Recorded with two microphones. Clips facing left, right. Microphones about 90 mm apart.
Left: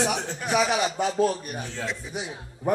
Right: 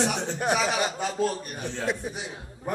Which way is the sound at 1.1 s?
15° left (ahead or behind).